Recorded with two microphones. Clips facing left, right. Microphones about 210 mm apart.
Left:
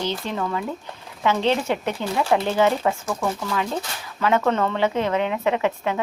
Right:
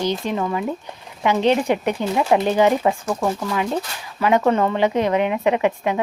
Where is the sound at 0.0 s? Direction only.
15° right (ahead or behind).